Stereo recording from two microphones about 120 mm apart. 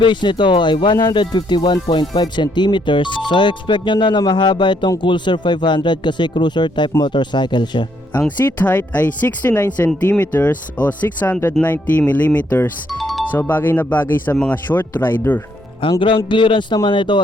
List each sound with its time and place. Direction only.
0.0 s speech: 40° left (ahead or behind)
8.5 s speech: 15° left (ahead or behind)
12.9 s music: centre (ahead or behind)
13.5 s speech: 15° left (ahead or behind)
15.8 s a man's voice: 45° left (ahead or behind)